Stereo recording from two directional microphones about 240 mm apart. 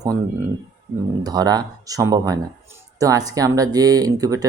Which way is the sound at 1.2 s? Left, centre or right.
Centre.